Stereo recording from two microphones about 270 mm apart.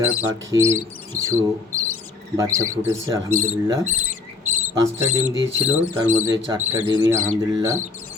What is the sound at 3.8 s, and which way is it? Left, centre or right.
Speech, right.